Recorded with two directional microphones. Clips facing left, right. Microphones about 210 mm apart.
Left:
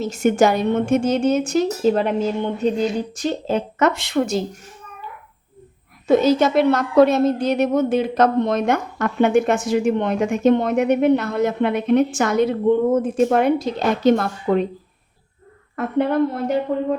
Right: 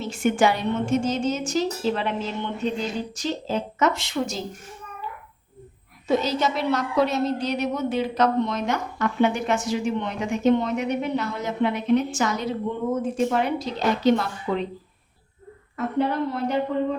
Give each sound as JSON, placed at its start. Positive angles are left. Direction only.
{"t": 0.0, "sound": "a woman's voice", "side_deg": 40}
{"t": 3.2, "sound": "speech", "side_deg": 55}
{"t": 6.1, "sound": "a woman's voice", "side_deg": 55}
{"t": 15.7, "sound": "speech", "side_deg": 55}